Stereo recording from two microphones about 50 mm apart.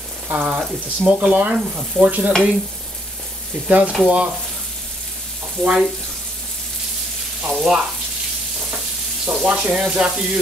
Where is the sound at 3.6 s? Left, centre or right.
Right.